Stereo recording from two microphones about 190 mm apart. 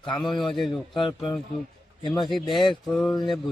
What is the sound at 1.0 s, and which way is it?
Speech, 25° left (ahead or behind).